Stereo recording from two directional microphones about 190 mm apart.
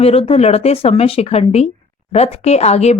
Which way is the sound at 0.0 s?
30° left (ahead or behind).